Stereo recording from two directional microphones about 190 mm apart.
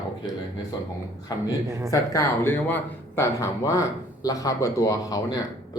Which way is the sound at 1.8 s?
15° left (ahead or behind).